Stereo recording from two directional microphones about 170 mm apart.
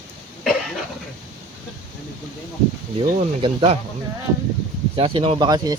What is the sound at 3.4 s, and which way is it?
Speech, 35° right (ahead or behind).